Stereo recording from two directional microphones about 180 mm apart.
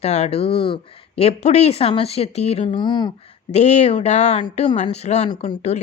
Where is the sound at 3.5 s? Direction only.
40° left (ahead or behind).